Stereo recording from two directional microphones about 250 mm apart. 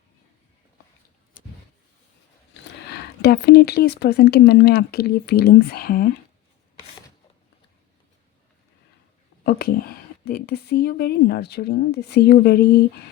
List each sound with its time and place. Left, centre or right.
2.5 s speech: left
9.4 s speech: left